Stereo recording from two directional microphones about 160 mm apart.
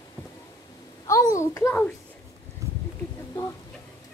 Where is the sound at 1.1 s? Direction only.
20° left (ahead or behind).